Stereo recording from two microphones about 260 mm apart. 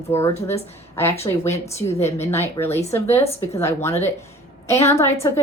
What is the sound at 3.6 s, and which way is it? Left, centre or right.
Speech, centre.